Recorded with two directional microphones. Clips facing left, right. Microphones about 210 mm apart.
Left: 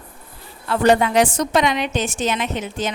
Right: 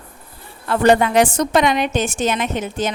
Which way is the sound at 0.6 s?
55° right (ahead or behind).